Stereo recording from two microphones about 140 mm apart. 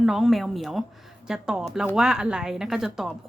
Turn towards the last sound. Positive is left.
turn(degrees=-5)  # may be behind; listen again after turning